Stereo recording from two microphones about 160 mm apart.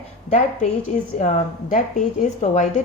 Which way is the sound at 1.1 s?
45° left (ahead or behind).